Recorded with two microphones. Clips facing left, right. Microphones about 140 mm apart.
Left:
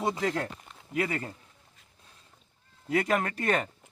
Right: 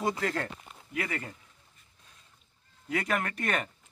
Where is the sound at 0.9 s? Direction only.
30° left (ahead or behind).